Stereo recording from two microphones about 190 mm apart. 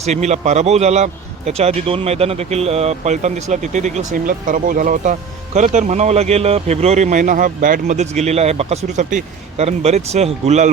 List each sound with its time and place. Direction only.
0.0 s a man's voice: 35° right (ahead or behind)